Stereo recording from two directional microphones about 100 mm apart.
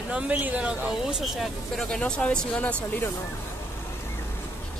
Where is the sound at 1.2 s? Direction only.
Centre (ahead or behind).